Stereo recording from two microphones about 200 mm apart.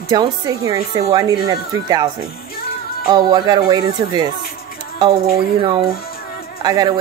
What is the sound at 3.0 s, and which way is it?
Speech, 20° right (ahead or behind).